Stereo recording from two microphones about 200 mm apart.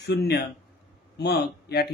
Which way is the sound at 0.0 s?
55° left (ahead or behind).